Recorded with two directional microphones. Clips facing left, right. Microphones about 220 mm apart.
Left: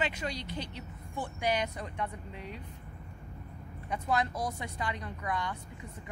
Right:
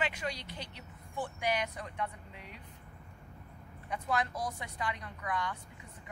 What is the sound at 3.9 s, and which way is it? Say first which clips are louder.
Speech: left 3 dB; 25° left (ahead or behind).